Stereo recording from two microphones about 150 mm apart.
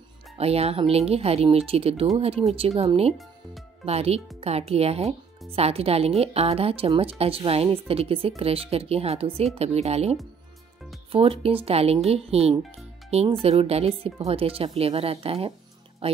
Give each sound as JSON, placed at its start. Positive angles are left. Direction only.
{"t": 0.4, "sound": "speech", "side_deg": -45}